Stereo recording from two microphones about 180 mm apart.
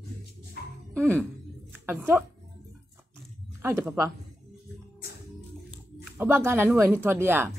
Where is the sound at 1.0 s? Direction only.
5° left (ahead or behind).